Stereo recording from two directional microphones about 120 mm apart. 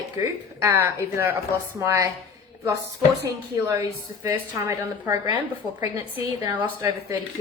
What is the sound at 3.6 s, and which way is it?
A woman's voice, 25° right (ahead or behind).